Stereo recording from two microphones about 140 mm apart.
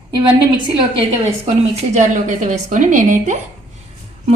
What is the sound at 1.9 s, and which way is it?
Speech, 60° right (ahead or behind).